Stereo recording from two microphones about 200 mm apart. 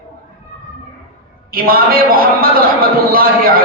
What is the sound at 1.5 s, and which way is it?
A man's voice, 45° right (ahead or behind).